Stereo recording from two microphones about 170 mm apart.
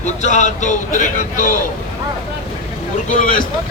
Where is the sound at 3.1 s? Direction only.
50° left (ahead or behind).